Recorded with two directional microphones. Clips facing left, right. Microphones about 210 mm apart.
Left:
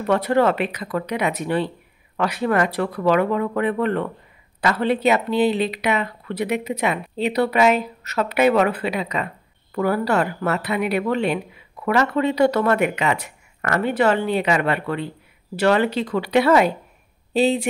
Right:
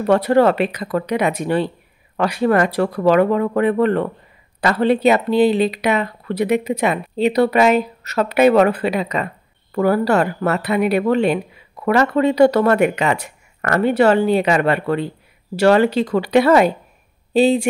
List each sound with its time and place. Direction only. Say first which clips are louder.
0.0 s speech: right 4 dB; 35° right (ahead or behind)